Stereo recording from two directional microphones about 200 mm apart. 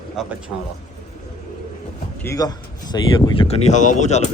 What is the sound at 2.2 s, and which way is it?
Speech, 15° left (ahead or behind).